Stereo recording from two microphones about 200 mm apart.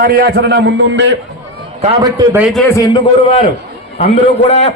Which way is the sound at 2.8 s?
25° left (ahead or behind).